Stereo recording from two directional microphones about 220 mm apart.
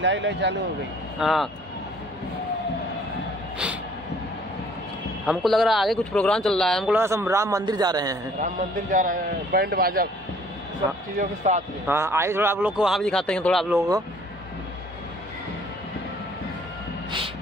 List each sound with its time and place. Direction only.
0.0 s speech: 55° right (ahead or behind)
1.2 s a man's voice: centre (ahead or behind)
5.2 s a man's voice: centre (ahead or behind)
7.0 s a man's voice: 10° right (ahead or behind)
8.9 s speech: 40° right (ahead or behind)
11.1 s speech: 30° right (ahead or behind)
11.9 s a man's voice: 10° right (ahead or behind)
13.7 s a man's voice: 15° right (ahead or behind)